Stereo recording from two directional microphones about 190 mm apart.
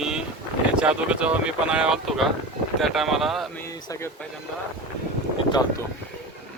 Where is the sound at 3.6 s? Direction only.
15° left (ahead or behind).